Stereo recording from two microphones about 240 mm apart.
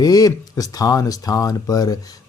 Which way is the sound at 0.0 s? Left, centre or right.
Centre.